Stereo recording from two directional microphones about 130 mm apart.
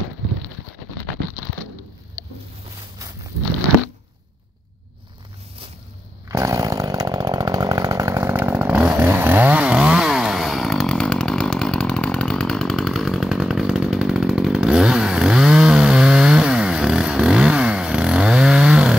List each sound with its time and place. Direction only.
6.2 s chainsaw: 25° right (ahead or behind); by 18.9 s 5° right (ahead or behind)